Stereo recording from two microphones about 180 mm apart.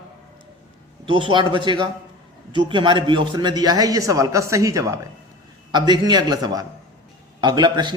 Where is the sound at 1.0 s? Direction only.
30° right (ahead or behind).